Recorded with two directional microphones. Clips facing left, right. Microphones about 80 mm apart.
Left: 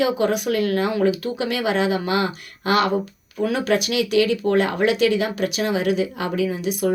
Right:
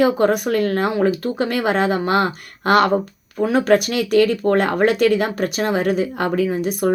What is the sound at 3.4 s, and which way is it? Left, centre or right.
Speech, right.